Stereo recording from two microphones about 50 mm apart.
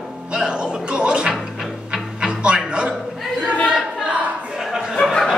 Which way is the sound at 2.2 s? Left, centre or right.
Centre.